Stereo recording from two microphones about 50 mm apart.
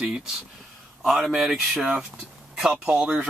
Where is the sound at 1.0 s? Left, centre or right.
Centre.